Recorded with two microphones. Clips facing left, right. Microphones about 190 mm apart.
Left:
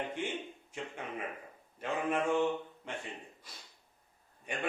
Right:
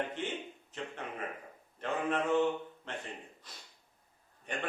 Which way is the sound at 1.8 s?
10° left (ahead or behind).